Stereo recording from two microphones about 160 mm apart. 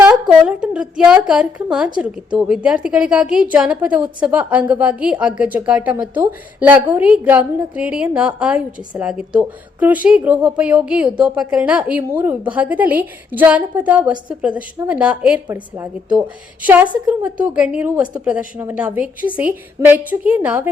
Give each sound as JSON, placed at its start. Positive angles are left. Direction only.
{"t": 0.0, "sound": "a woman's voice", "side_deg": -5}